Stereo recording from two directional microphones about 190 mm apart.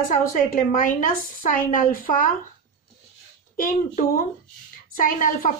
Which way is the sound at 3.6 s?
45° left (ahead or behind).